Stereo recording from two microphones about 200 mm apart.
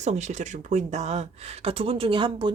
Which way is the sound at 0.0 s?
35° right (ahead or behind).